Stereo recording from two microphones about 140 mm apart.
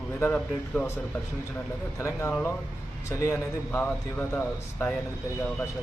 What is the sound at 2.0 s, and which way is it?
A man's voice, 20° left (ahead or behind).